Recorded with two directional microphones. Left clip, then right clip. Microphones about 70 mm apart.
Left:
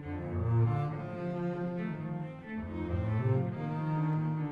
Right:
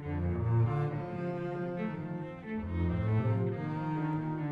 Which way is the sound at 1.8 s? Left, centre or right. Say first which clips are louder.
Right 1 dB; centre.